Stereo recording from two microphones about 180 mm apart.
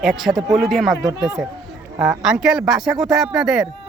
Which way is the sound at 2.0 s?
5° right (ahead or behind).